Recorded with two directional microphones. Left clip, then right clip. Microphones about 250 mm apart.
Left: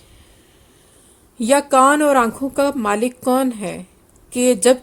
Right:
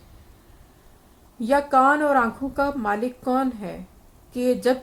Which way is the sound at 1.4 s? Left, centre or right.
Left.